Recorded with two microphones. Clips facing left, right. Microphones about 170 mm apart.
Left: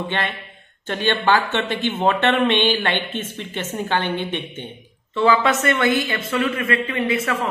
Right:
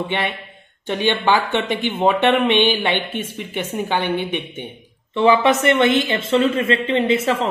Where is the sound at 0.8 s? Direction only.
15° right (ahead or behind).